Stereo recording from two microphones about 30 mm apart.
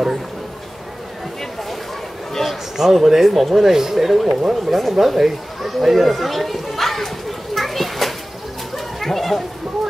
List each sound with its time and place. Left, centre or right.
2.8 s speech: centre
3.6 s speech: centre
4.3 s speech: right
4.6 s speech: centre
4.9 s chatter: centre
8.7 s a sound: centre